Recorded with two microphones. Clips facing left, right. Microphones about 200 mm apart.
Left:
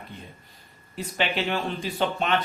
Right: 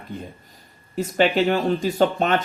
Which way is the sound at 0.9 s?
45° right (ahead or behind).